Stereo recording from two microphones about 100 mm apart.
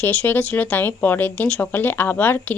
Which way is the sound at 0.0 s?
15° left (ahead or behind).